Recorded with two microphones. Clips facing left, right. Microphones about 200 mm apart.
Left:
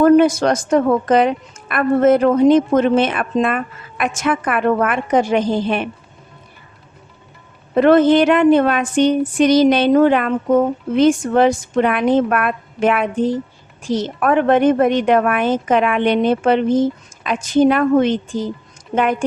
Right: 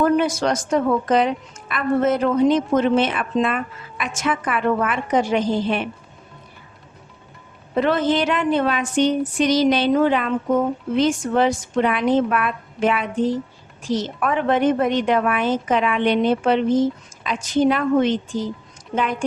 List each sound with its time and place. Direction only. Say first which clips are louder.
0.0 s a woman's voice: left 7 dB; 50° left (ahead or behind)
7.8 s a woman's voice: left 8 dB; 55° left (ahead or behind)